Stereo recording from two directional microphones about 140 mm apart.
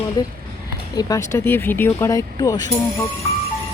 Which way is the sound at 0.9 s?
25° left (ahead or behind).